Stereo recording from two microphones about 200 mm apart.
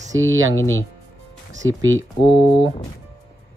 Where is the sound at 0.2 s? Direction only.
80° right.